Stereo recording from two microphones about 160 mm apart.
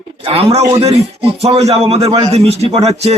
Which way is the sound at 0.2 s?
35° right (ahead or behind).